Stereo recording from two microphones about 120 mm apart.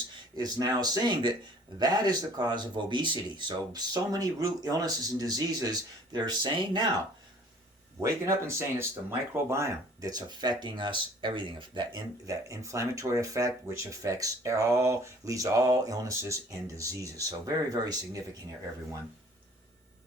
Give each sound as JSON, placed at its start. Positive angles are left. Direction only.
{"t": 0.3, "sound": "speech", "side_deg": -35}
{"t": 7.9, "sound": "speech", "side_deg": -25}
{"t": 12.3, "sound": "speech", "side_deg": -25}